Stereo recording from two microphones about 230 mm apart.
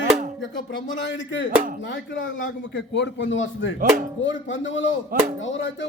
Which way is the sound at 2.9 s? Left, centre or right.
Left.